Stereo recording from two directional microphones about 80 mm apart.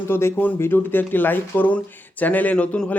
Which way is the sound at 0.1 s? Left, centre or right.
Left.